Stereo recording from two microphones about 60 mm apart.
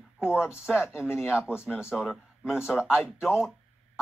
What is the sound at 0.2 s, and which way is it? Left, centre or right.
Speech, centre.